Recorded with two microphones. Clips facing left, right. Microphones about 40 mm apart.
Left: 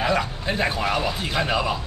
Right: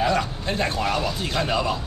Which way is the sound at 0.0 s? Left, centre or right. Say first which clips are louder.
Even; centre.